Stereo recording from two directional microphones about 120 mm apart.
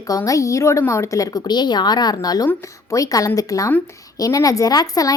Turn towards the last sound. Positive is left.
turn(degrees=30)  # may be behind; listen again after turning